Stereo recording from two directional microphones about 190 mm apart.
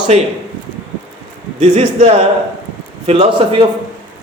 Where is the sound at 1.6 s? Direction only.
35° right (ahead or behind).